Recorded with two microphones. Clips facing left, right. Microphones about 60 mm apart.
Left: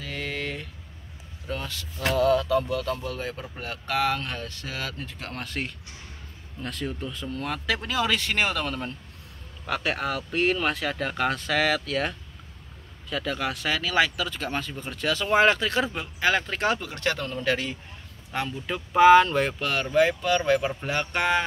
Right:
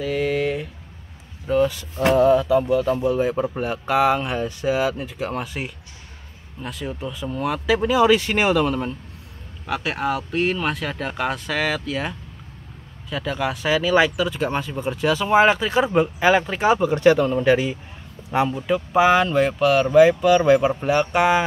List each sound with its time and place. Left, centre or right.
0.0 s a sound: centre
1.5 s speech: centre
2.0 s speech: right; by 21.5 s centre